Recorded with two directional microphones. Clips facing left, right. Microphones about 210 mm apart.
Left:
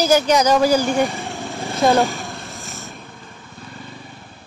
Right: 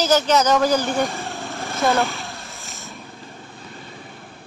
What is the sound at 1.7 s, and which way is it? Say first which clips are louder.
Speech: left 4 dB; 15° left (ahead or behind).